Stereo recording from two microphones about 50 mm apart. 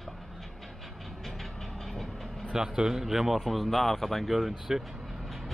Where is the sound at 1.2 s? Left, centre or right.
Centre.